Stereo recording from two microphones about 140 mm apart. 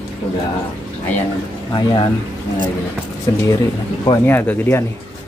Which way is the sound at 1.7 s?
35° left (ahead or behind).